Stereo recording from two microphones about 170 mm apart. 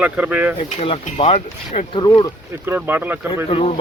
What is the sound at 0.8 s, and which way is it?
Speech, 35° left (ahead or behind).